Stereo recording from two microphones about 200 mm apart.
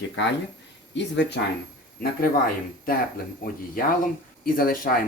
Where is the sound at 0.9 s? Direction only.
60° left (ahead or behind).